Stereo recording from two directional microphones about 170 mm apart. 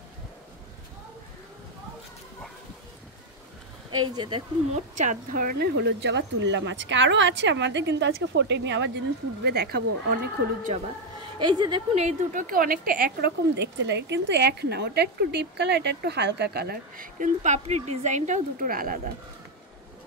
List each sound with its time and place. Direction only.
4.1 s speech: 25° right (ahead or behind)
4.7 s speech: 45° right (ahead or behind); by 10.7 s 70° right (ahead or behind)
11.3 s speech: 25° right (ahead or behind)
11.9 s speech: 40° right (ahead or behind)